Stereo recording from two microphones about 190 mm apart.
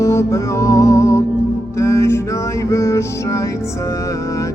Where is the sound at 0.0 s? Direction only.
15° left (ahead or behind).